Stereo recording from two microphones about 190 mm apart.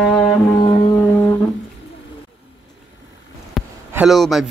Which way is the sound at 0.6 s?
30° left (ahead or behind).